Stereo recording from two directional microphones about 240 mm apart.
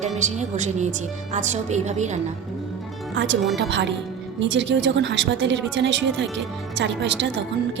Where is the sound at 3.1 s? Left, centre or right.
Right.